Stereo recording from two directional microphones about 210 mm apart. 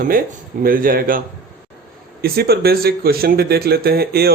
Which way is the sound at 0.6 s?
45° right (ahead or behind).